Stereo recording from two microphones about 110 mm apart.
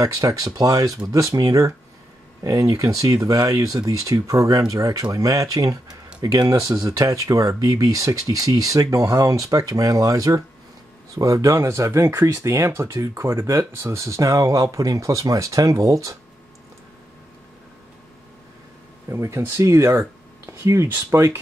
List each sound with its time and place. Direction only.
0.0 s speech: 30° right (ahead or behind)
19.0 s speech: 25° right (ahead or behind)